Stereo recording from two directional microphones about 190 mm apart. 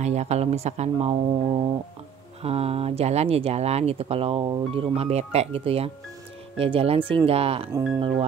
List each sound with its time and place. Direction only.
0.0 s speech: 35° right (ahead or behind)